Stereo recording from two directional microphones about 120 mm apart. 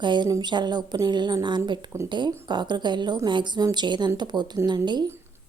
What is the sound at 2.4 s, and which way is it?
A woman's voice, 40° right (ahead or behind).